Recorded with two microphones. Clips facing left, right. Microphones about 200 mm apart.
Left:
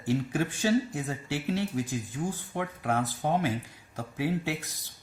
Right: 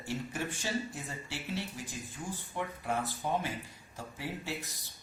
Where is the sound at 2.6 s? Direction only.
70° left (ahead or behind).